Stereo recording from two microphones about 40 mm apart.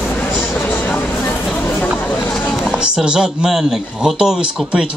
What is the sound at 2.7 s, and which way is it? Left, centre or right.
Speech, right.